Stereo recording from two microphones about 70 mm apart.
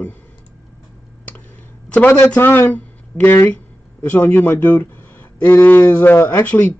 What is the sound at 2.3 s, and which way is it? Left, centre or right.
Speech, left.